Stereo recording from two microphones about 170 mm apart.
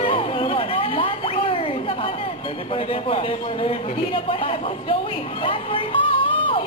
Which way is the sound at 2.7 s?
35° left (ahead or behind).